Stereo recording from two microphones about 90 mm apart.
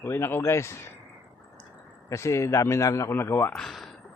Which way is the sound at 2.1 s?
30° left (ahead or behind).